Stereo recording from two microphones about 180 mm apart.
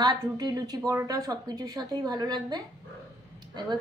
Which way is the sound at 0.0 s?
20° right (ahead or behind).